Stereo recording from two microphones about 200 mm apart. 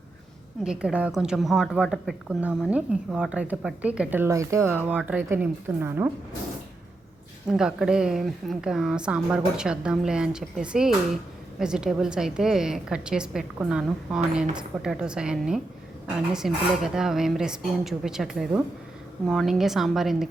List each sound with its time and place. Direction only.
0.6 s a woman's voice: 5° right (ahead or behind)
7.4 s a woman's voice: 5° right (ahead or behind)